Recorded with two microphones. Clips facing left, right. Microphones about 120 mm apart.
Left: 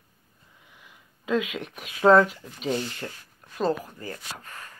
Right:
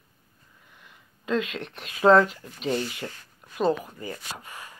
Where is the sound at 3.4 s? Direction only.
10° right (ahead or behind).